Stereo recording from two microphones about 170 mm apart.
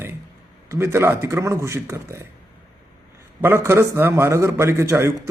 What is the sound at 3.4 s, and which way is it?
Speech, 15° right (ahead or behind).